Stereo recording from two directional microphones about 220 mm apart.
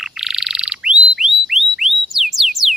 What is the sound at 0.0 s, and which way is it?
Bird, centre (ahead or behind).